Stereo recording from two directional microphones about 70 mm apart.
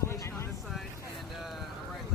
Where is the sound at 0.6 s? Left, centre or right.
Centre.